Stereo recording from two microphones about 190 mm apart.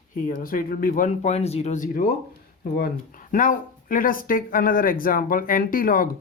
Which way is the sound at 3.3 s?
45° left (ahead or behind).